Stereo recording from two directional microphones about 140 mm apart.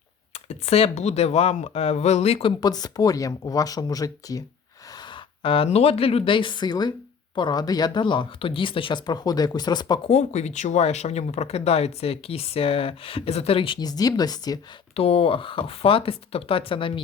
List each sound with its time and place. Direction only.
0.3 s speech: 50° left (ahead or behind)
2.6 s speech: 30° left (ahead or behind)
10.1 s speech: 55° left (ahead or behind); by 14.6 s 30° left (ahead or behind)
14.9 s speech: 45° left (ahead or behind)